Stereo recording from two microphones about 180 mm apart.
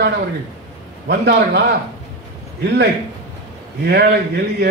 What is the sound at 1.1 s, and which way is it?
Speech, 70° right (ahead or behind).